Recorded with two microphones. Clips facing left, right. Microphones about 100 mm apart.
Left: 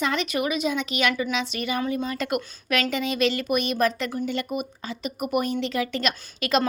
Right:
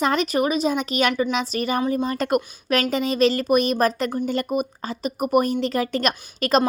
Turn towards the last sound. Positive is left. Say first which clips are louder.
# right 4 dB
turn(degrees=-40)  # may be behind; listen again after turning